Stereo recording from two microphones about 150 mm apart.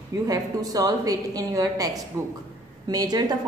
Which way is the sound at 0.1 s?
25° right (ahead or behind).